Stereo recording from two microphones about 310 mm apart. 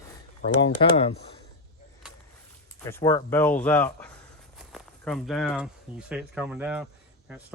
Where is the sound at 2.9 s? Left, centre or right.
Centre.